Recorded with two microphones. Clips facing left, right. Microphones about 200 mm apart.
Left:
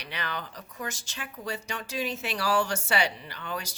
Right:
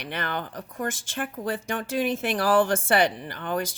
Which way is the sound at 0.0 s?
50° right (ahead or behind).